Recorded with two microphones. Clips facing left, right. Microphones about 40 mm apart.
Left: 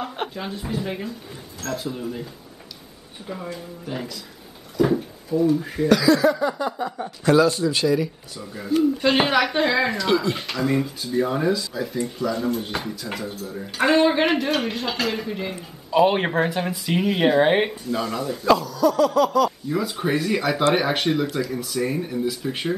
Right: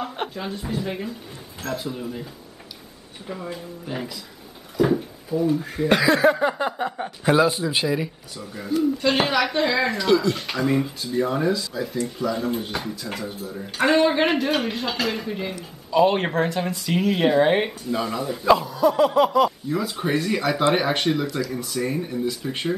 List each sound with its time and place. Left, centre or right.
0.0 s speech: centre
3.5 s speech: centre
4.7 s drawer open or close: centre
5.6 s speech: centre
5.9 s a sound: right
7.2 s speech: centre
8.4 s speech: centre
9.0 s speech: centre
10.4 s speech: centre
15.9 s speech: centre
17.6 s speech: centre; by 19.5 s right
19.7 s speech: centre